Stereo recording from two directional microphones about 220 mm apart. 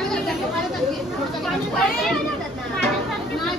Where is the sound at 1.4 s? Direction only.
Centre (ahead or behind).